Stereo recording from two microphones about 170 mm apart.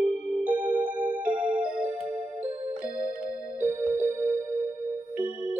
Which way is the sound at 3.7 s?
15° right (ahead or behind).